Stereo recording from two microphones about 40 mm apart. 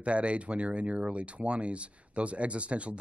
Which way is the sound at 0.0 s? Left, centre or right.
Right.